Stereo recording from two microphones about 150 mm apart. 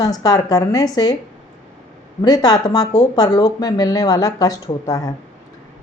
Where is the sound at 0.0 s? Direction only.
25° left (ahead or behind).